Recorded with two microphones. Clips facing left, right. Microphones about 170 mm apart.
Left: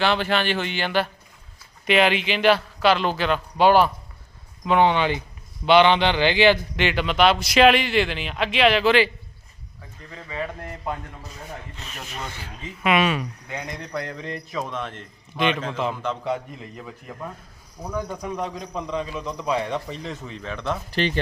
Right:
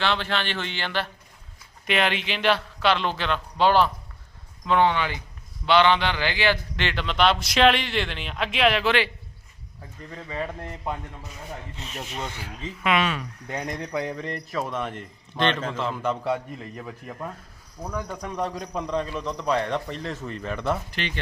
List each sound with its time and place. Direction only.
0.0 s a man's voice: 10° left (ahead or behind)
10.2 s speech: 30° right (ahead or behind)
11.8 s rub: 25° right (ahead or behind)
12.8 s speech: 10° left (ahead or behind)
13.9 s speech: 10° right (ahead or behind)
14.2 s a man's voice: centre (ahead or behind)
15.4 s speech: 10° left (ahead or behind)
16.0 s a man's voice: 5° right (ahead or behind)
17.9 s a man's voice: 5° left (ahead or behind)
21.0 s speech: 35° left (ahead or behind)